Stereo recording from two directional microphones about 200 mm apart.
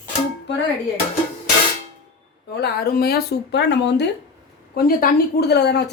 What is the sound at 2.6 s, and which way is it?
Speech, 50° left (ahead or behind).